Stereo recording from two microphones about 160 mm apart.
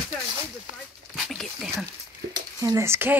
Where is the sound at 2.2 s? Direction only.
75° right (ahead or behind).